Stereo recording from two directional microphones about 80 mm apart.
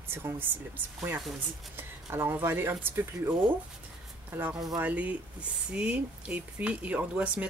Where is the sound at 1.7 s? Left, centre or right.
Right.